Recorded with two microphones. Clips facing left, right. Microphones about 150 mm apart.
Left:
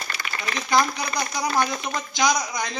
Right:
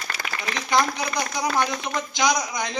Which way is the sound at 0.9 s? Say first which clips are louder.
Right 1 dB; 20° right (ahead or behind).